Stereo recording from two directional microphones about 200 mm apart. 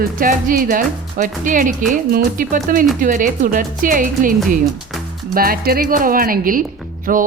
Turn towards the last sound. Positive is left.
turn(degrees=-45)  # may be behind; listen again after turning